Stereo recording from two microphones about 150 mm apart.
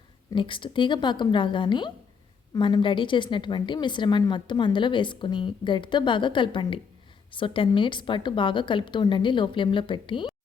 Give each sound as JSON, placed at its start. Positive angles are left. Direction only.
{"t": 0.3, "sound": "a woman's voice", "side_deg": 35}